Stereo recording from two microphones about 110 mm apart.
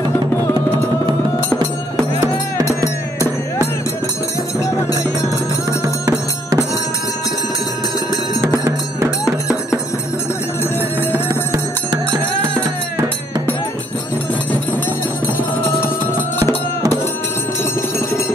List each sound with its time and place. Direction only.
2.1 s music: 30° right (ahead or behind)
5.7 s music: 30° right (ahead or behind)
11.0 s music: 25° right (ahead or behind)